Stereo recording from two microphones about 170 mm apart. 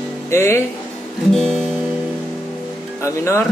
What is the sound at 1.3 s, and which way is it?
Music, 5° left (ahead or behind).